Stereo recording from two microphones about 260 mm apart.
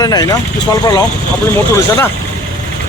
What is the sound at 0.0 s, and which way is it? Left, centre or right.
Speech, centre.